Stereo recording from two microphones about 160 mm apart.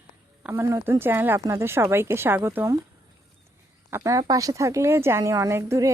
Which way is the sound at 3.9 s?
20° right (ahead or behind).